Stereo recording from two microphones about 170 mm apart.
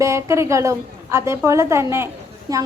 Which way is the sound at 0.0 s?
15° right (ahead or behind).